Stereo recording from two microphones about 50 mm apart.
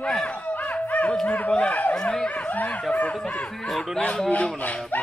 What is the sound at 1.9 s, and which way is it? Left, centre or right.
Speech, centre.